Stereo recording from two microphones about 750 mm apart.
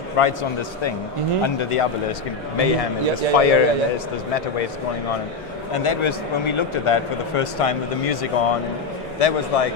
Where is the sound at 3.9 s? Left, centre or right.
Left.